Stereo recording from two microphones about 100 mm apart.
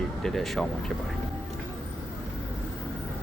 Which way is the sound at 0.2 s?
Centre (ahead or behind).